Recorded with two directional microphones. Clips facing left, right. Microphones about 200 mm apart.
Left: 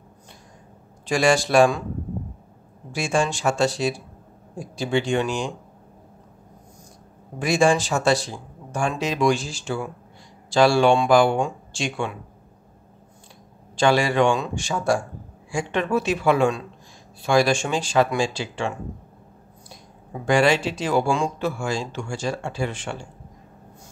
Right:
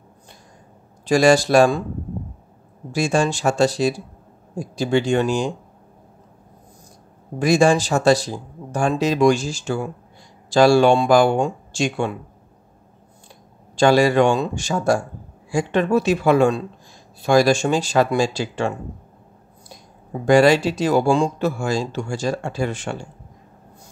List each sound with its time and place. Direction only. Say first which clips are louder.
1.0 s speech: right 5 dB; 40° right (ahead or behind)
2.9 s speech: right 4 dB; 40° right (ahead or behind)
7.3 s speech: right 3 dB; 40° right (ahead or behind)
13.7 s speech: right 4 dB; 40° right (ahead or behind)
20.2 s speech: right 5 dB; 40° right (ahead or behind)